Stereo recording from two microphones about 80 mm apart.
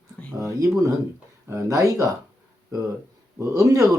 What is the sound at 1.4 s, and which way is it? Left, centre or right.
Speech, right.